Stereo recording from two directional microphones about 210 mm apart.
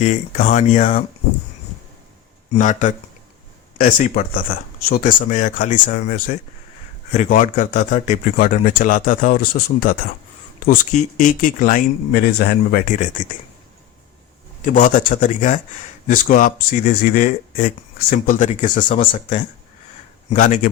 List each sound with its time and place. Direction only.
0.0 s a man's voice: 35° left (ahead or behind)
2.5 s a man's voice: 35° left (ahead or behind)
14.6 s a man's voice: 40° left (ahead or behind)